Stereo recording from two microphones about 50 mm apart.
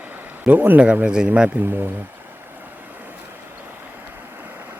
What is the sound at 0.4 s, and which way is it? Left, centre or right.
Speech, right.